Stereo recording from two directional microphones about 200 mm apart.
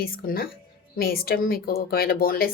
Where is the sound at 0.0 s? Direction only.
50° left (ahead or behind).